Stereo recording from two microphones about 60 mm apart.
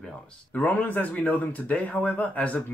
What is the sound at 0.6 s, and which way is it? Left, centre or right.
Speech, left.